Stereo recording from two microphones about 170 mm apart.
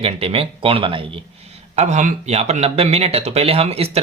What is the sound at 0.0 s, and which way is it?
Speech, 35° right (ahead or behind).